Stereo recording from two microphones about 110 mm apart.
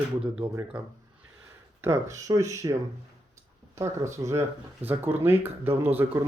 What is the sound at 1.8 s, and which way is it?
Speech, 25° right (ahead or behind).